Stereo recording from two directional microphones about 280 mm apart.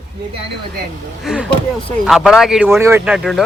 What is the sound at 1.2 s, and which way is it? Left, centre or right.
Speech, centre.